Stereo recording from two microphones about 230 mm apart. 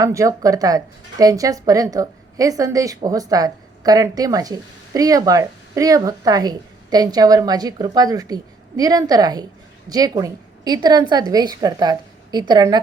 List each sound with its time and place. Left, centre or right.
0.0 s a woman's voice: centre